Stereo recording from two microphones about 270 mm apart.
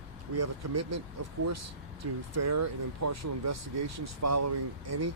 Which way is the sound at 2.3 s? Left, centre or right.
Right.